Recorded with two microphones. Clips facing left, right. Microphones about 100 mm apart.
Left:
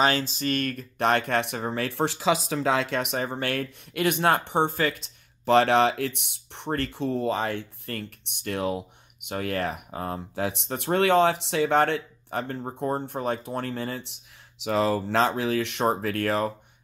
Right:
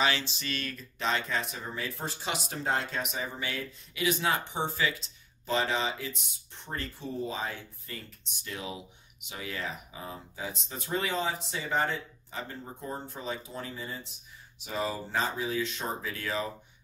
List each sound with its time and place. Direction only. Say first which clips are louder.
0.0 s speech: left 6 dB; 45° left (ahead or behind); by 16.5 s 60° left (ahead or behind)